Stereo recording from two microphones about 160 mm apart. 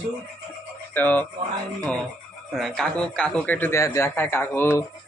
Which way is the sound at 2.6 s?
Centre (ahead or behind).